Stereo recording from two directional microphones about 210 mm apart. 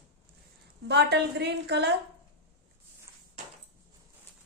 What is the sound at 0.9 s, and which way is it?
A woman's voice, 55° right (ahead or behind).